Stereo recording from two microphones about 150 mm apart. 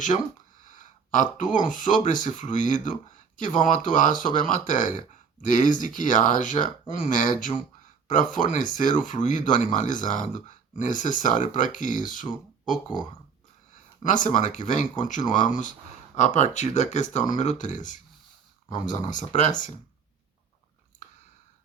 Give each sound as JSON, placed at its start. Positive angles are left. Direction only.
{"t": 0.6, "sound": "speech", "side_deg": 60}
{"t": 14.0, "sound": "speech", "side_deg": 60}